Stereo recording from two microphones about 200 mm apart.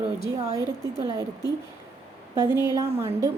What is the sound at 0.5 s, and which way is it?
Speech, 15° right (ahead or behind).